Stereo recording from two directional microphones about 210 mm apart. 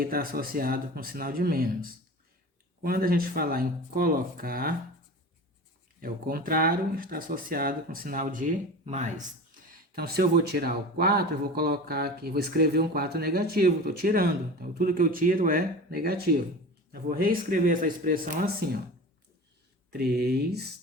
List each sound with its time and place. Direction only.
0.0 s speech: 45° right (ahead or behind)
6.0 s speech: 45° right (ahead or behind)
9.9 s speech: 50° right (ahead or behind)
19.9 s speech: 50° right (ahead or behind)